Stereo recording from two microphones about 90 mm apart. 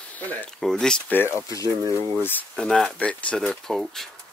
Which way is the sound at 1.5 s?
40° left (ahead or behind).